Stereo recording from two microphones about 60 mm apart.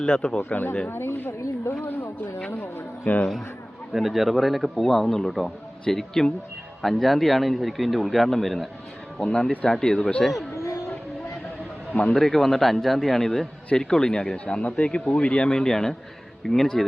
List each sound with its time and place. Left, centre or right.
0.0 s speech: centre
0.4 s speech: left
0.9 s a sound: left
2.6 s music: left
3.9 s a man's voice: centre
9.1 s speech: centre
11.9 s speech: centre
12.3 s a man's voice: centre